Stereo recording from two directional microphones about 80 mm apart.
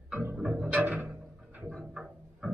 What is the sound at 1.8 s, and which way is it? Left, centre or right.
Music, centre.